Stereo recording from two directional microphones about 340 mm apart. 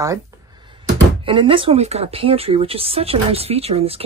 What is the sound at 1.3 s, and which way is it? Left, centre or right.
Speech, centre.